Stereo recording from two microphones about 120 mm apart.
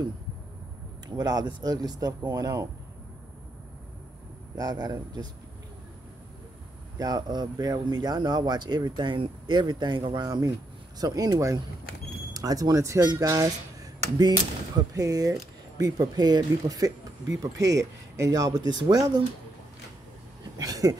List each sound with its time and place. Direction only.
1.0 s speech: 35° right (ahead or behind)
4.6 s speech: 35° right (ahead or behind)
7.0 s speech: 35° right (ahead or behind)
15.0 s speech: 30° right (ahead or behind)
20.5 s a sound: 30° right (ahead or behind)